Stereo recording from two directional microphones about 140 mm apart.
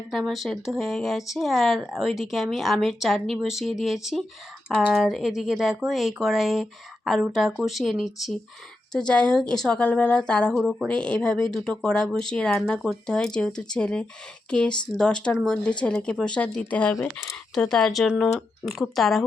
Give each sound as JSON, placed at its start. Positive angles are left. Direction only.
{"t": 0.1, "sound": "a woman's voice", "side_deg": 0}
{"t": 16.9, "sound": "speech", "side_deg": 20}
{"t": 17.5, "sound": "a woman's voice", "side_deg": 5}